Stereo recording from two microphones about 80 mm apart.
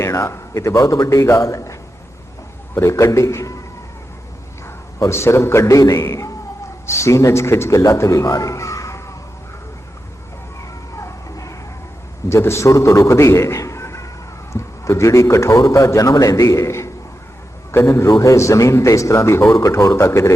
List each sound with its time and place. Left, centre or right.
0.0 s a man's voice: left
2.7 s a man's voice: left
4.9 s a man's voice: left
6.1 s a man's voice: left
10.6 s a sound: left
12.3 s a man's voice: left